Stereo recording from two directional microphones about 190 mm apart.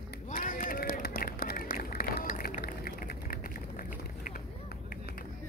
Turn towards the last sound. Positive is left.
turn(degrees=50)  # may be behind; listen again after turning